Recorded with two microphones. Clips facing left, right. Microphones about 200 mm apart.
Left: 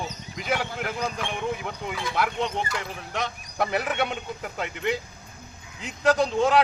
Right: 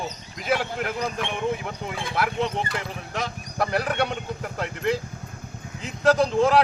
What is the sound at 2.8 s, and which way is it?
Speech, centre (ahead or behind).